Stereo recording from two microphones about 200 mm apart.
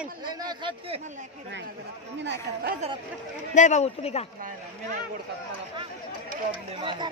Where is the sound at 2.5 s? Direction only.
55° right (ahead or behind).